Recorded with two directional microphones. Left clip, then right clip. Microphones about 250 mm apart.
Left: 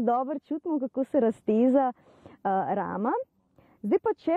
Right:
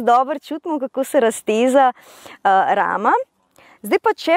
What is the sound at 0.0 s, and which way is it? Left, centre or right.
Speech, centre.